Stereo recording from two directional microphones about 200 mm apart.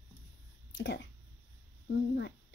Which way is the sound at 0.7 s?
60° left (ahead or behind).